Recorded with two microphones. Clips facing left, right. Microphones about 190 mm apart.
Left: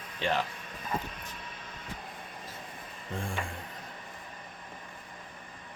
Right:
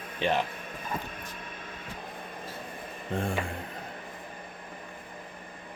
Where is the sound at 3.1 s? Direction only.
60° right (ahead or behind).